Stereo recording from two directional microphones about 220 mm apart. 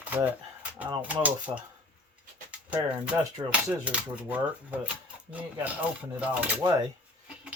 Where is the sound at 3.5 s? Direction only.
5° right (ahead or behind).